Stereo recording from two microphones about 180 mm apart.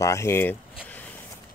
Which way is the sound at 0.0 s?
15° left (ahead or behind).